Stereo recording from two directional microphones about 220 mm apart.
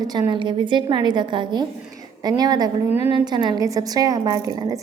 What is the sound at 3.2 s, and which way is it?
A woman's voice, 20° right (ahead or behind).